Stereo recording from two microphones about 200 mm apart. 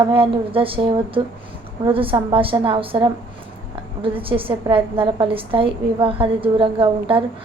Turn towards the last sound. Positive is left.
turn(degrees=-25)  # may be behind; listen again after turning